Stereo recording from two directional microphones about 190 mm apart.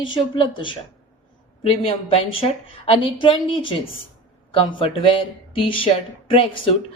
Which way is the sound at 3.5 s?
25° left (ahead or behind).